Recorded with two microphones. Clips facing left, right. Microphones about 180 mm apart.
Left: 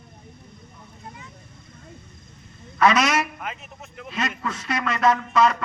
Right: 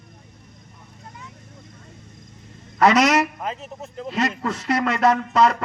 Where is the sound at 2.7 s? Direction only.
35° right (ahead or behind).